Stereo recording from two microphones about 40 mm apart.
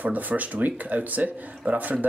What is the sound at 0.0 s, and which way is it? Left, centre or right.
Speech, right.